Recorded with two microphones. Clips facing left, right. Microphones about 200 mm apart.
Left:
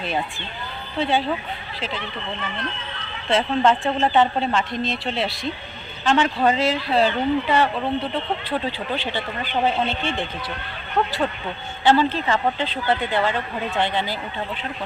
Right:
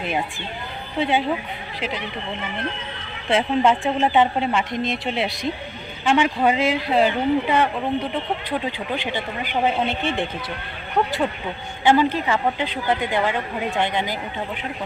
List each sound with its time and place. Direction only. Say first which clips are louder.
0.9 s a woman's voice: right 1 dB; 15° right (ahead or behind)
3.2 s a woman's voice: even; 15° right (ahead or behind)